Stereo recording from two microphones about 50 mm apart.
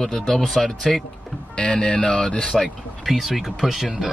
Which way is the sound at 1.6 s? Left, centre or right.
Centre.